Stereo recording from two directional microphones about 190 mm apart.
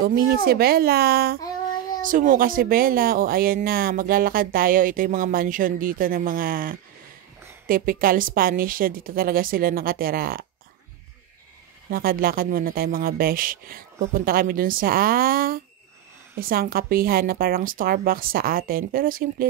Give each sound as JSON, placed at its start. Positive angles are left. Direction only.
{"t": 0.0, "sound": "speech", "side_deg": -50}
{"t": 11.9, "sound": "speech", "side_deg": -50}